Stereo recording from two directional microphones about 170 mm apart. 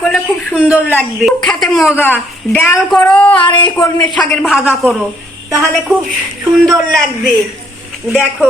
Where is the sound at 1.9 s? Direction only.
10° left (ahead or behind).